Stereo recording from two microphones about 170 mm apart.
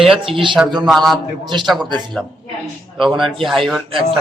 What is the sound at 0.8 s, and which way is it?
Speech, centre (ahead or behind).